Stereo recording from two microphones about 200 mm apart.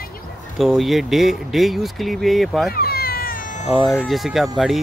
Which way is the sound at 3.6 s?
5° right (ahead or behind).